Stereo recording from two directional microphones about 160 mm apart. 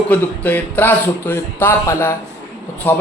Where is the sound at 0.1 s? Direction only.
10° left (ahead or behind).